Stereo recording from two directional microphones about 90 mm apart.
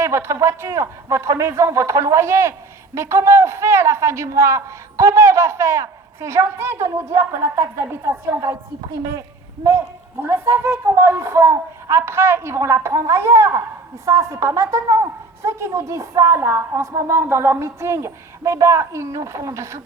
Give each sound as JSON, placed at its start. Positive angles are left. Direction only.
{"t": 0.0, "sound": "a man's voice", "side_deg": -30}
{"t": 9.6, "sound": "a man's voice", "side_deg": -30}